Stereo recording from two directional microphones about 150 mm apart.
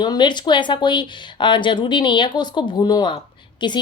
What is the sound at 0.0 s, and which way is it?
A woman's voice, 30° left (ahead or behind).